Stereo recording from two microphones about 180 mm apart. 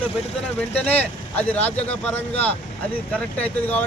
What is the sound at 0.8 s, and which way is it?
Speech, 10° left (ahead or behind).